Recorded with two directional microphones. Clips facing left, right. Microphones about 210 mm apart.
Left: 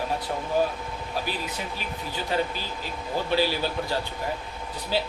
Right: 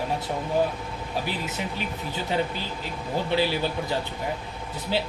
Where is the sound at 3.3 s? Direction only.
20° right (ahead or behind).